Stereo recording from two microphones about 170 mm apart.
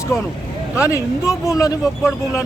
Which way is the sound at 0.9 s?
20° left (ahead or behind).